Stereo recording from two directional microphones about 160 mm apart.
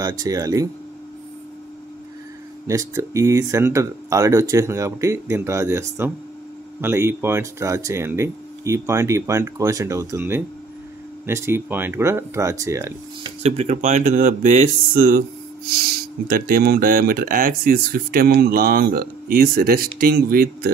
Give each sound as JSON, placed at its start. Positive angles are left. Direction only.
{"t": 0.2, "sound": "speech", "side_deg": -20}
{"t": 2.6, "sound": "speech", "side_deg": -20}
{"t": 13.2, "sound": "speech", "side_deg": -40}
{"t": 16.3, "sound": "speech", "side_deg": -65}